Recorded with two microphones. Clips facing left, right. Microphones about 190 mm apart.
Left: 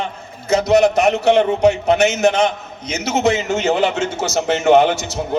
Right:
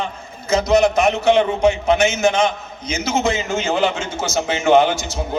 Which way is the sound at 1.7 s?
65° left (ahead or behind).